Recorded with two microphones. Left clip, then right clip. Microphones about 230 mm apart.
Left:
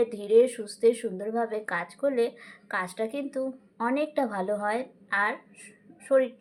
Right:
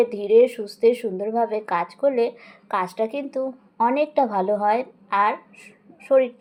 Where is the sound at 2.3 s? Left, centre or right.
Left.